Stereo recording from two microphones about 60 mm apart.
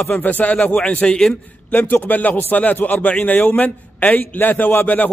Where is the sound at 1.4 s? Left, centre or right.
Left.